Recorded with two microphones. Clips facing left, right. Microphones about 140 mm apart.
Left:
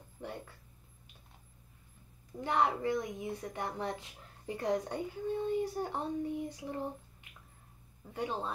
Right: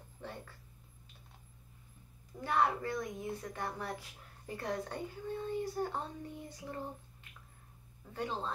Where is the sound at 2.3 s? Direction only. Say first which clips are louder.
Left 1 dB; 20° left (ahead or behind).